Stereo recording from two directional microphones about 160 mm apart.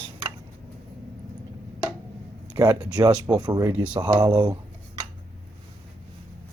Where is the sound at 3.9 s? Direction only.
25° right (ahead or behind).